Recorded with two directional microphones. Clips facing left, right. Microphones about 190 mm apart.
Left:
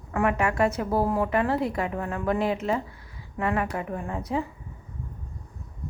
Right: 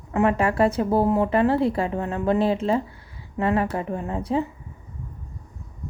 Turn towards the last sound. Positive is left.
turn(degrees=-30)  # may be behind; listen again after turning